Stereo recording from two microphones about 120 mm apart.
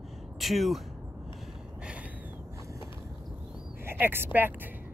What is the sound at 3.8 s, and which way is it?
Speech, 20° right (ahead or behind).